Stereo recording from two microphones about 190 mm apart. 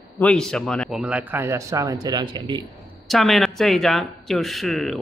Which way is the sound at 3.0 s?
Centre (ahead or behind).